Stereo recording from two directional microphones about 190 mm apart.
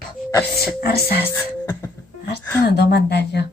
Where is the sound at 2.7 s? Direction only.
60° left (ahead or behind).